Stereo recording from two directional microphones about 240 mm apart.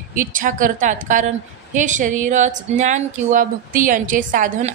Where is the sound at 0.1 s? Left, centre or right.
Right.